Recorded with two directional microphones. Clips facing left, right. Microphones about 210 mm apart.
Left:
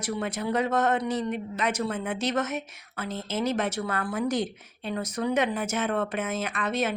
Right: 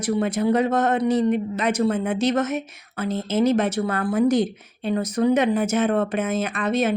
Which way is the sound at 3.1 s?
20° right (ahead or behind).